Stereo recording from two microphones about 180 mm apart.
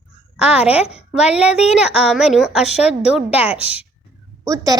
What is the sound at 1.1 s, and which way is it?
A woman's voice, 5° right (ahead or behind).